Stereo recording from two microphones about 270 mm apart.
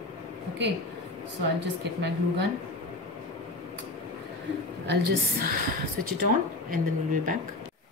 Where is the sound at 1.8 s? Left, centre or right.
Right.